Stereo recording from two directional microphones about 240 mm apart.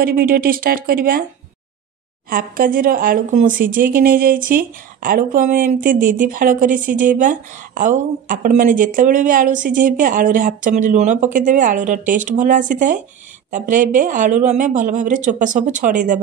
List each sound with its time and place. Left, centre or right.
0.0 s speech: right
2.2 s speech: right